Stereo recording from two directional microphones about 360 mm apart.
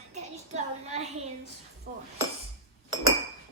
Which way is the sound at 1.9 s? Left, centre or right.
Right.